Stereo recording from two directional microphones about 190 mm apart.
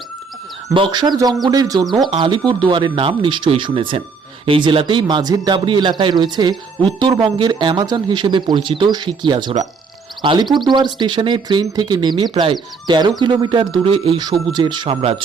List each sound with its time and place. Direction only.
0.7 s speech: 25° right (ahead or behind)